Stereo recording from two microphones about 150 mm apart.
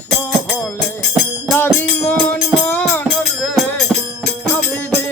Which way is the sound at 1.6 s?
15° left (ahead or behind).